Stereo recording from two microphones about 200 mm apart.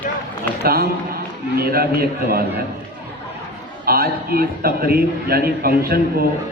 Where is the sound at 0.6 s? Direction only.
50° right (ahead or behind).